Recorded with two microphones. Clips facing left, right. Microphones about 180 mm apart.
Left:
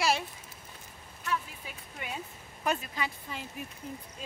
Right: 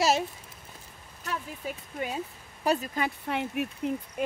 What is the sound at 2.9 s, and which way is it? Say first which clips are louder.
Speech: right 7 dB; 60° right (ahead or behind).